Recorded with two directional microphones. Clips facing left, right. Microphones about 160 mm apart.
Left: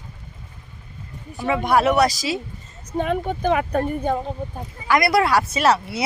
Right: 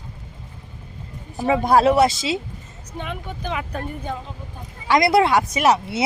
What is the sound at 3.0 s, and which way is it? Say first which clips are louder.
Speech: left 9 dB; 50° left (ahead or behind).